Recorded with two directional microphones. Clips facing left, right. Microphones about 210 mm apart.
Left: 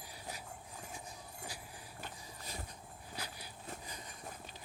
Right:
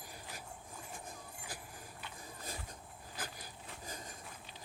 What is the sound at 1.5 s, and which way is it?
Vehicle, 50° right (ahead or behind).